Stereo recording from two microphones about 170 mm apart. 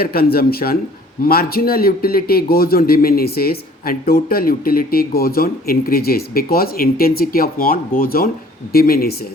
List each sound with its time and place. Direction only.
0.0 s a man's voice: 65° left (ahead or behind)